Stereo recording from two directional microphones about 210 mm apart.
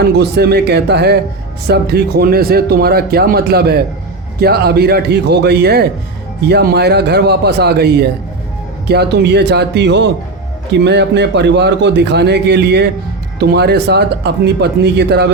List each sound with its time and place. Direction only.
0.0 s speech: 50° right (ahead or behind)